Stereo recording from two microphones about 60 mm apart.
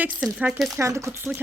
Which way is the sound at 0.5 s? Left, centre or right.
Centre.